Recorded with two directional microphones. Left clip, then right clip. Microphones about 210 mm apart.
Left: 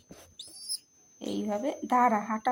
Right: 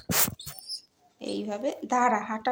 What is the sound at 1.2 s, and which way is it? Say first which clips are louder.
A woman's voice: right 1 dB; 40° left (ahead or behind).